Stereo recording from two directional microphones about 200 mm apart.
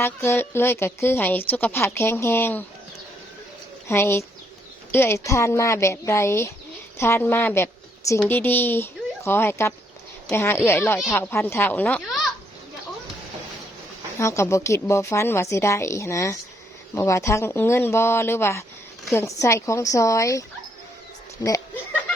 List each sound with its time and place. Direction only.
0.0 s a woman's voice: 10° left (ahead or behind)
3.8 s a woman's voice: 15° left (ahead or behind)
14.2 s a woman's voice: 15° left (ahead or behind)